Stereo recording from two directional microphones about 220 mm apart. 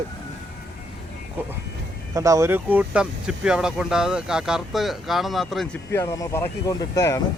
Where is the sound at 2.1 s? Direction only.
15° right (ahead or behind); by 7.2 s 15° left (ahead or behind).